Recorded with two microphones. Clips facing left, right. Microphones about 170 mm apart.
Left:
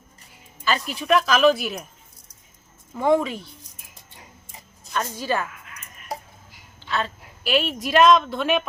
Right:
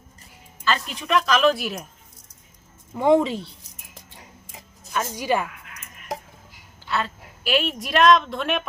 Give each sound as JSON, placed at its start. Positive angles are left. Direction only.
{"t": 0.6, "sound": "a woman's voice", "side_deg": 5}
{"t": 2.9, "sound": "speech", "side_deg": -20}
{"t": 4.9, "sound": "a woman's voice", "side_deg": -15}
{"t": 6.9, "sound": "a woman's voice", "side_deg": 0}